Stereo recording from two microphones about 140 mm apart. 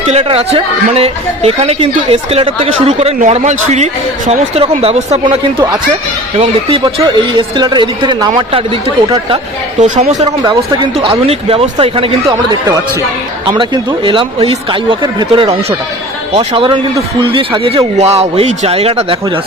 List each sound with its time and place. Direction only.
0.0 s speech: 45° right (ahead or behind)
5.2 s speech: 30° right (ahead or behind)
7.3 s speech: 30° right (ahead or behind)
9.8 s speech: 60° right (ahead or behind)
10.4 s speech: 30° right (ahead or behind)
17.9 s speech: 50° right (ahead or behind)